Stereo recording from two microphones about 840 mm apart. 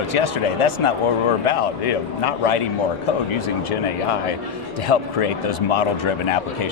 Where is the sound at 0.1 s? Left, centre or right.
Left.